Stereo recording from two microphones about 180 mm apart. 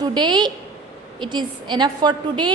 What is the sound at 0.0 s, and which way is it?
A woman's voice, 25° right (ahead or behind).